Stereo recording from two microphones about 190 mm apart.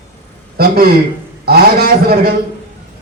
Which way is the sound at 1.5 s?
55° right (ahead or behind).